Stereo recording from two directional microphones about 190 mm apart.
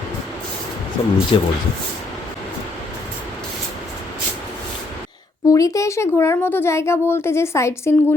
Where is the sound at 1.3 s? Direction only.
25° left (ahead or behind).